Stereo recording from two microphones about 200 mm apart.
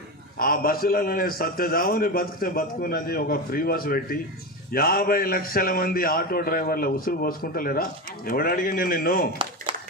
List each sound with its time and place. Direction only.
0.3 s a man's voice: 45° left (ahead or behind)